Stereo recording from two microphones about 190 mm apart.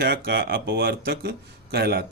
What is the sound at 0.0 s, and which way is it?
Speech, 55° right (ahead or behind).